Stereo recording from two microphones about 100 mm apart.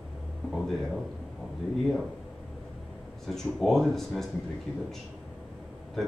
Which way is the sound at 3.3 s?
Centre (ahead or behind).